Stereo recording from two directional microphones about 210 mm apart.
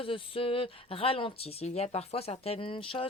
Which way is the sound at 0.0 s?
25° left (ahead or behind).